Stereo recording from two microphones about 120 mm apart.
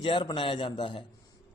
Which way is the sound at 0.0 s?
40° left (ahead or behind).